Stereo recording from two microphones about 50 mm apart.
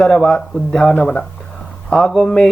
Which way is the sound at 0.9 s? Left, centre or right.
Left.